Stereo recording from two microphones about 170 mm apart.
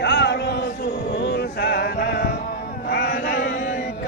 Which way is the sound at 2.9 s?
70° left (ahead or behind).